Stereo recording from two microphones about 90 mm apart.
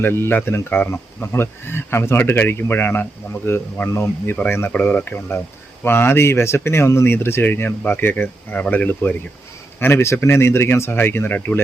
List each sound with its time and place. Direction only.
0.0 s speech: 25° left (ahead or behind)